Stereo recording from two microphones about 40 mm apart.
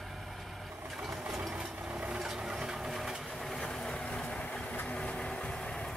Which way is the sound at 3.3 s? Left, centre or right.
Centre.